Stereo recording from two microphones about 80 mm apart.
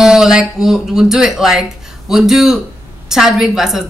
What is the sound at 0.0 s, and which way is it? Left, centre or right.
Speech, centre.